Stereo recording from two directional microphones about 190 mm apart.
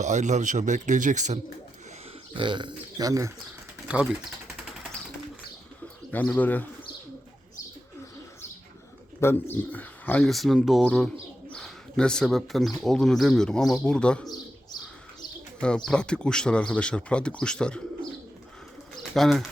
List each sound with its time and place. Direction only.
0.0 s speech: 40° right (ahead or behind)
2.3 s speech: 25° right (ahead or behind)
3.8 s typewriter: 5° right (ahead or behind)
6.1 s speech: 10° left (ahead or behind)
9.2 s speech: 10° left (ahead or behind)
15.6 s speech: 5° left (ahead or behind)
19.1 s speech: centre (ahead or behind)